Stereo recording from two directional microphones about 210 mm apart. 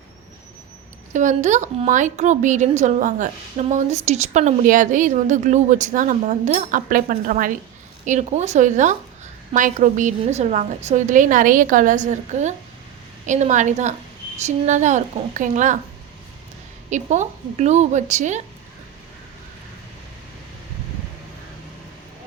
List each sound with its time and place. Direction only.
1.1 s a woman's voice: 35° right (ahead or behind)
16.9 s a woman's voice: 35° right (ahead or behind)